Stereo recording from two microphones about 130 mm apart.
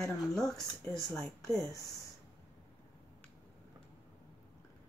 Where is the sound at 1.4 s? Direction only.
25° left (ahead or behind).